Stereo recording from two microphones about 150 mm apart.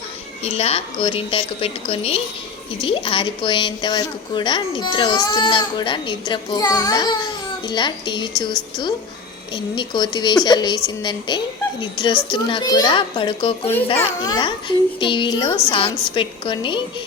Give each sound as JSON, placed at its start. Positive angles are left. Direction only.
{"t": 0.4, "sound": "a woman's voice", "side_deg": 45}